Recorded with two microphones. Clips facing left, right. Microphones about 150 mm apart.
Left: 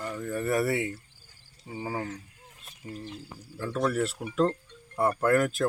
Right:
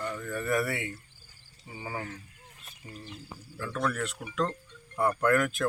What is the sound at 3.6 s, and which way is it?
Speech, 25° left (ahead or behind).